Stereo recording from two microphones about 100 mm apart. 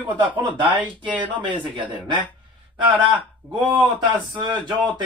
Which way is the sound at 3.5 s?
55° right (ahead or behind).